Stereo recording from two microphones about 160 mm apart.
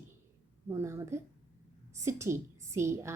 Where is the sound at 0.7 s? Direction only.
15° right (ahead or behind).